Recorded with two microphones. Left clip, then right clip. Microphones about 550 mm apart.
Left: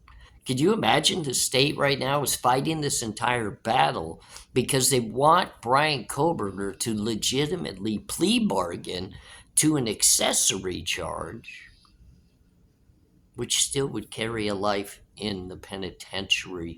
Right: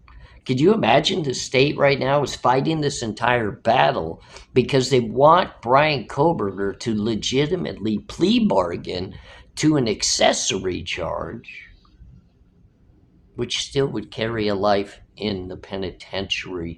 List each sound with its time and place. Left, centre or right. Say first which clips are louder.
0.2 s speech: right 5 dB; left
13.3 s speech: right 3 dB; left